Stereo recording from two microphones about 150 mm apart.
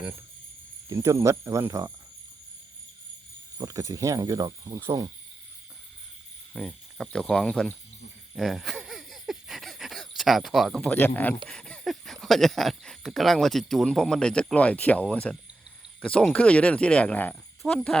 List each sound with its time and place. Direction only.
0.9 s speech: 20° right (ahead or behind)
3.6 s speech: 20° right (ahead or behind)
6.5 s speech: 10° left (ahead or behind)
8.4 s a sound: centre (ahead or behind)
11.4 s speech: 5° left (ahead or behind)